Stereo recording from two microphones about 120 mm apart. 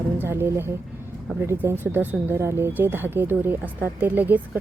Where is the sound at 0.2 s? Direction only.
20° right (ahead or behind).